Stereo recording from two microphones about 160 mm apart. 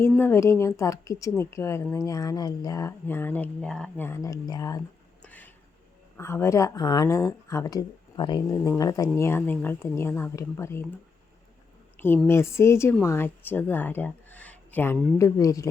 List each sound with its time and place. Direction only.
0.0 s speech: 15° left (ahead or behind)
5.2 s a sound: 10° left (ahead or behind)
6.1 s speech: 15° left (ahead or behind)
12.0 s speech: 15° left (ahead or behind)